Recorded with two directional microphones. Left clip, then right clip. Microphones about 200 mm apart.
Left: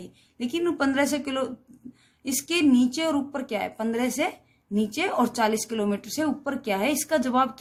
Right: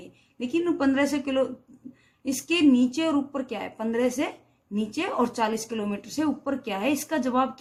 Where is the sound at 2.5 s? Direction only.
55° left (ahead or behind).